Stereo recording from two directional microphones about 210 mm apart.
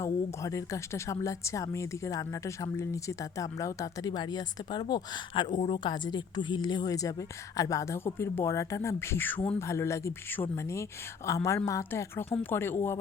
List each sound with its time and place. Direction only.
0.0 s speech: 15° left (ahead or behind)